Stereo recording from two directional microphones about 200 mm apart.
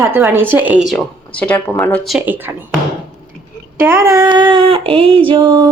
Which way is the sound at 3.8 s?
10° right (ahead or behind).